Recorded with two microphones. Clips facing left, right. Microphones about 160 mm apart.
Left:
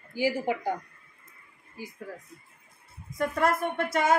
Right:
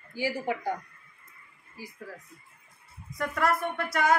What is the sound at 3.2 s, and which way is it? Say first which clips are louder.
Speech: left 2 dB; 25° left (ahead or behind).